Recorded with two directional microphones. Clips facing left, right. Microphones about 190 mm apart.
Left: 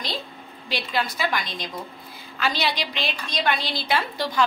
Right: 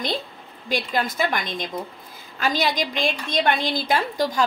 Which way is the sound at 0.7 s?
45° right (ahead or behind).